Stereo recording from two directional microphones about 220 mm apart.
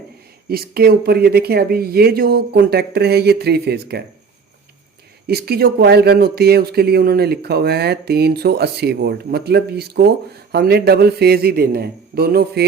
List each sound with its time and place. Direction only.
0.4 s speech: 45° right (ahead or behind)
5.3 s speech: 45° right (ahead or behind)